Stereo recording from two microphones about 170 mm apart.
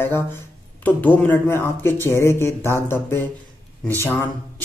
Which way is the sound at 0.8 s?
10° left (ahead or behind).